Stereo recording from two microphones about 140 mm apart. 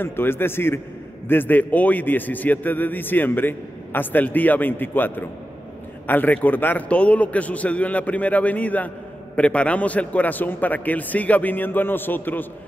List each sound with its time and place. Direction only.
0.0 s a man's voice: 15° left (ahead or behind)